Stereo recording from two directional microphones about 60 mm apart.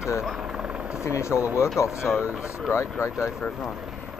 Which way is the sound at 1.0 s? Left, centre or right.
Left.